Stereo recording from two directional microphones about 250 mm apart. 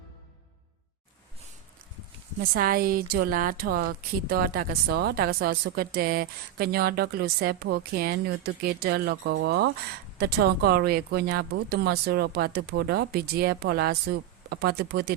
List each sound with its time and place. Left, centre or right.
2.4 s a woman's voice: right